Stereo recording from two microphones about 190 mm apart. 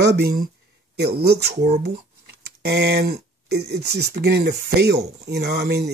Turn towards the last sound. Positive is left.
turn(degrees=-60)  # may be behind; listen again after turning